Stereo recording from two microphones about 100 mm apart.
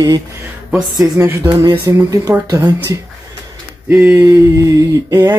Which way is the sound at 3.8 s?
15° right (ahead or behind).